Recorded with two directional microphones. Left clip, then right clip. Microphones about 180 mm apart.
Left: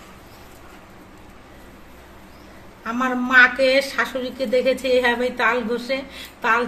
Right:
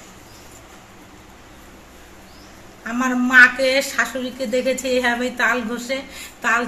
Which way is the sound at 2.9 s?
40° left (ahead or behind).